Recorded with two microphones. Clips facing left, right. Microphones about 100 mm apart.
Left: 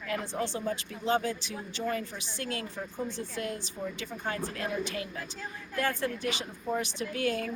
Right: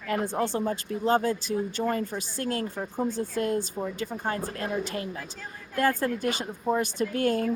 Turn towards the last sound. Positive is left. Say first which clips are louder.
# right 6 dB
turn(degrees=-45)  # may be behind; listen again after turning